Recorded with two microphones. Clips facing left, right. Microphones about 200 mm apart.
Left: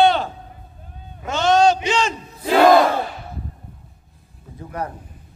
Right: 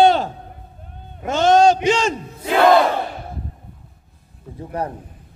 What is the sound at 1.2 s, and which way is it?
Speech, 50° right (ahead or behind).